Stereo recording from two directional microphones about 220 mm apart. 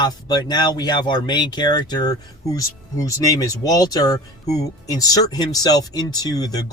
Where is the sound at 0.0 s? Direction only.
20° left (ahead or behind).